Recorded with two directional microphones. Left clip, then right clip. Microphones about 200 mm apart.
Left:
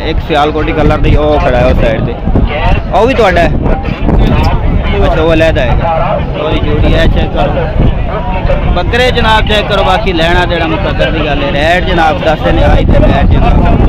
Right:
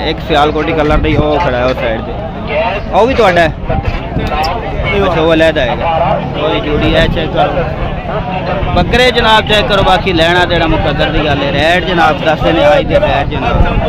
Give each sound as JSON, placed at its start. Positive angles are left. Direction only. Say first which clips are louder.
{"t": 0.3, "sound": "speech", "louder": "left 1 dB", "side_deg": 5}
{"t": 5.1, "sound": "speech", "louder": "left 1 dB", "side_deg": 5}
{"t": 8.7, "sound": "speech", "louder": "right 2 dB", "side_deg": 0}